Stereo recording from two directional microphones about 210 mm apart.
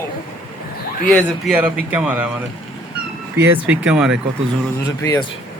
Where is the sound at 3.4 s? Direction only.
10° right (ahead or behind).